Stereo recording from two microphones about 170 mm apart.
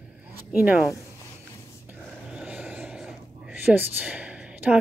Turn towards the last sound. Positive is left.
turn(degrees=-10)  # may be behind; listen again after turning